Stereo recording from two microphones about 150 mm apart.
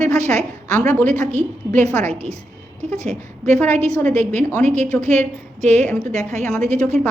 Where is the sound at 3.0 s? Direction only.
50° right (ahead or behind).